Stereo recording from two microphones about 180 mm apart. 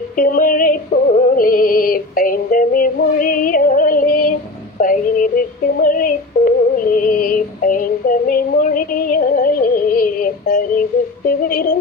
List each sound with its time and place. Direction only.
0.2 s music: 50° left (ahead or behind)
4.8 s a sound: 50° left (ahead or behind)
11.3 s yodeling: 50° left (ahead or behind)